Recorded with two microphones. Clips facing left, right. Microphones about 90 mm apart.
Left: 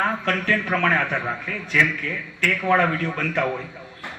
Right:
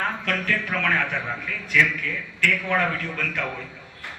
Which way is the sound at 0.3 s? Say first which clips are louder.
Left 4 dB; 35° left (ahead or behind).